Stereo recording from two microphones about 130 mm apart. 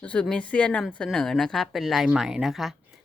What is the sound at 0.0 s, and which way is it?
A woman's voice, 10° left (ahead or behind).